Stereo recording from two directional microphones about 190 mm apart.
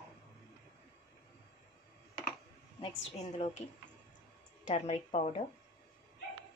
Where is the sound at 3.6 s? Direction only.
35° left (ahead or behind).